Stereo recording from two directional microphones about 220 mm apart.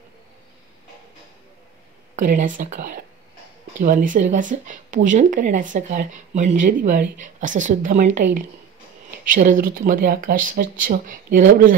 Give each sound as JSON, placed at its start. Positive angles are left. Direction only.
{"t": 2.2, "sound": "speech", "side_deg": -35}